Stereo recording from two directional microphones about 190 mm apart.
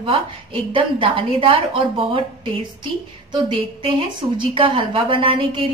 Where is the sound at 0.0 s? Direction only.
30° right (ahead or behind).